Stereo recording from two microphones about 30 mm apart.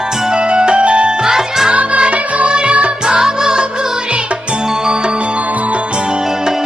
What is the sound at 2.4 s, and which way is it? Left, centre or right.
Music, right.